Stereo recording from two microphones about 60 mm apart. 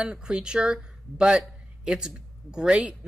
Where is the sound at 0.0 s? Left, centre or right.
Centre.